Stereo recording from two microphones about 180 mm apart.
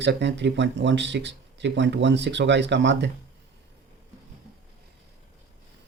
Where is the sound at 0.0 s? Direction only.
75° right (ahead or behind).